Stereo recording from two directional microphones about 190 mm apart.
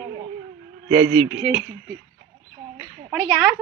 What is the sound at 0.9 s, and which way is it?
Speech, 15° right (ahead or behind).